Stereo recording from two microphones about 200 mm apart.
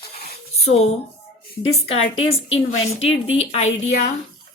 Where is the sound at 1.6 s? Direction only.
30° left (ahead or behind).